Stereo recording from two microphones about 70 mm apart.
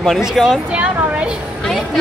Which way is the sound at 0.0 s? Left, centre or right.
Centre.